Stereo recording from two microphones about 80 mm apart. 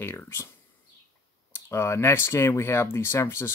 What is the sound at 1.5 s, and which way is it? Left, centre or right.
Speech, left.